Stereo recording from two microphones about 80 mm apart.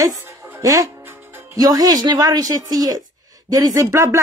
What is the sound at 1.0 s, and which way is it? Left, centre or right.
Music, right.